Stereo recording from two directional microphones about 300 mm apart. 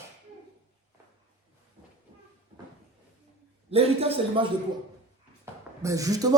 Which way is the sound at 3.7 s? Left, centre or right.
Centre.